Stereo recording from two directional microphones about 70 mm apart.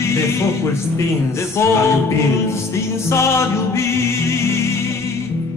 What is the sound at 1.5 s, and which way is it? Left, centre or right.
Music, left.